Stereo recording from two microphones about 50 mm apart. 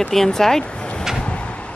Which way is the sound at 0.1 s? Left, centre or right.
Centre.